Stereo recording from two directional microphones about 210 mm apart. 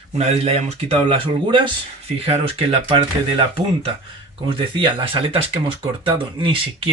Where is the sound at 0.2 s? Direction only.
30° right (ahead or behind).